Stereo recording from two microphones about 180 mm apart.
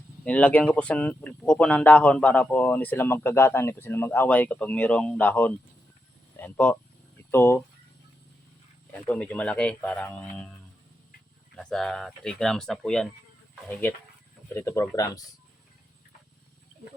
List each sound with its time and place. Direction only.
0.3 s speech: 10° left (ahead or behind)
8.9 s speech: 5° left (ahead or behind)
11.5 s speech: centre (ahead or behind); by 15.2 s 20° left (ahead or behind)